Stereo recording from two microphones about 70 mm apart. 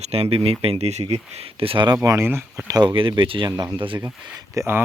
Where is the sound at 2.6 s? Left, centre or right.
Right.